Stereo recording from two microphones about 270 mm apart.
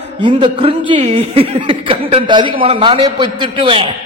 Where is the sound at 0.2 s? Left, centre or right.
Centre.